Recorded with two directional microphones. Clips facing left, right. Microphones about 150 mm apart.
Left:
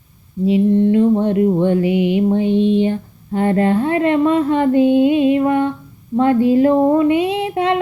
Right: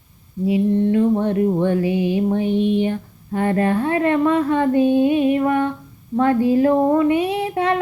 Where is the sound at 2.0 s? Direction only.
20° left (ahead or behind).